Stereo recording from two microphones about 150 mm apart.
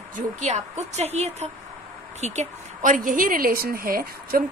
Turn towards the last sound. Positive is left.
turn(degrees=-75)  # may be behind; listen again after turning